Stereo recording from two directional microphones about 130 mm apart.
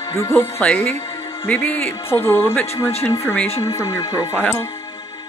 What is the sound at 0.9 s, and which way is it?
Music, 25° left (ahead or behind).